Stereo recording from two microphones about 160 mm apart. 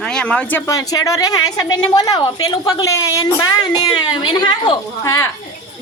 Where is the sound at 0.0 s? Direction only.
5° left (ahead or behind).